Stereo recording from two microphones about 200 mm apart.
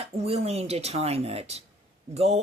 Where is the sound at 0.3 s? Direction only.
30° right (ahead or behind).